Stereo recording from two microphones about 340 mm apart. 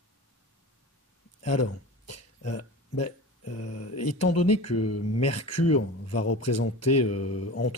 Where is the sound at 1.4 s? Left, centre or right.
Left.